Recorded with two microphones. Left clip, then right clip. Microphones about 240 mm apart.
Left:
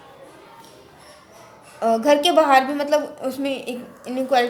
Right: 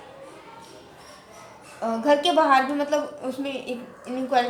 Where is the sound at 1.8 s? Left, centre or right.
Left.